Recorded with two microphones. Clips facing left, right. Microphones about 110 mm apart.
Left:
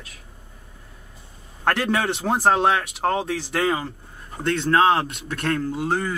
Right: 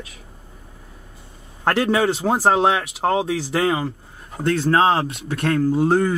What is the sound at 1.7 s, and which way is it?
Speech, centre (ahead or behind).